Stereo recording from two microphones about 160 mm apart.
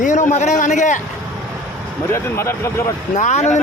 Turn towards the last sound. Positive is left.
turn(degrees=45)  # may be behind; listen again after turning